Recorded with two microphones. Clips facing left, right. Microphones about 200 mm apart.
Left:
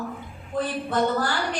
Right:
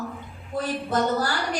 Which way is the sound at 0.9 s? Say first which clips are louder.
Even; 40° right (ahead or behind).